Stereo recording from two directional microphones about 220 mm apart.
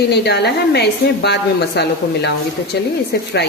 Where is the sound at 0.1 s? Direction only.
50° left (ahead or behind).